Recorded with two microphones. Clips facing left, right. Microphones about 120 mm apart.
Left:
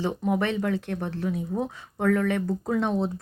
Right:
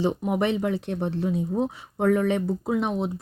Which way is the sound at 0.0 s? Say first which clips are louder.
Right 2 dB; 20° right (ahead or behind).